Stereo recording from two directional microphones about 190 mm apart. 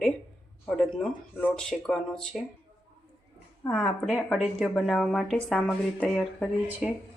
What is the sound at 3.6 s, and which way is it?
Speech, 10° left (ahead or behind).